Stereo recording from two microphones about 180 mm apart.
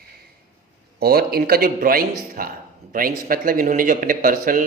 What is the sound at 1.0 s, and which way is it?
A man's voice, 55° right (ahead or behind).